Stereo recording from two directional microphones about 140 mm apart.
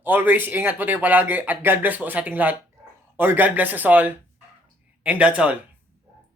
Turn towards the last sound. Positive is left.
turn(degrees=-10)  # may be behind; listen again after turning